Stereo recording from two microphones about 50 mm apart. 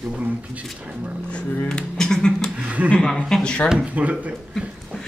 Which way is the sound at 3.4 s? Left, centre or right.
Left.